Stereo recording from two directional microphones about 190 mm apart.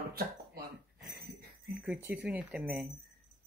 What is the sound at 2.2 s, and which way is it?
Speech, 5° right (ahead or behind).